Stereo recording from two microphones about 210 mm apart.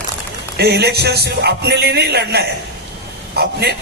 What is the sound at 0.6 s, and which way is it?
A man's voice, 50° right (ahead or behind).